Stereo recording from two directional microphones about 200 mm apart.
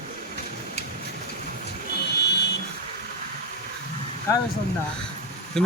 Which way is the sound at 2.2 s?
55° left (ahead or behind).